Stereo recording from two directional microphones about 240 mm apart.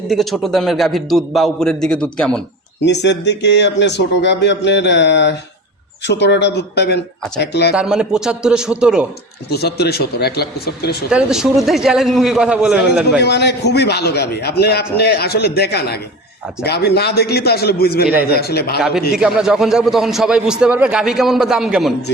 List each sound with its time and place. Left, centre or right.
0.1 s a man's voice: centre
2.8 s speech: left
7.7 s a man's voice: centre
9.5 s speech: left
11.1 s a man's voice: centre
13.1 s speech: left
19.1 s a man's voice: centre